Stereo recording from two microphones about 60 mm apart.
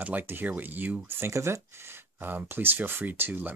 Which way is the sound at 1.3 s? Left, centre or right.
Right.